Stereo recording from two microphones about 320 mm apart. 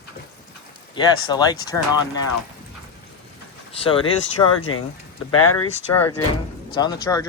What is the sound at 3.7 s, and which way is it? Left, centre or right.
Speech, centre.